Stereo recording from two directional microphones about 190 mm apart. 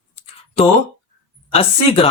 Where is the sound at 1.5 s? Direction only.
30° left (ahead or behind).